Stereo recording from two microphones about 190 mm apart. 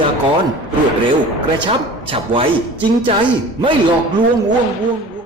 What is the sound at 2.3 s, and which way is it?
Speech, 25° right (ahead or behind).